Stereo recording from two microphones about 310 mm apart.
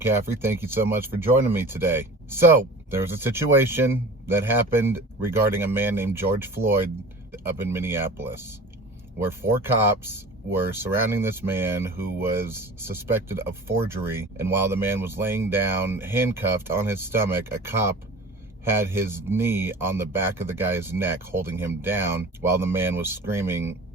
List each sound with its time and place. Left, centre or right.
0.0 s speech: centre